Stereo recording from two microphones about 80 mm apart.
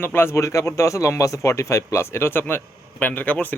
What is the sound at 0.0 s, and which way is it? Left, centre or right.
A man's voice, left.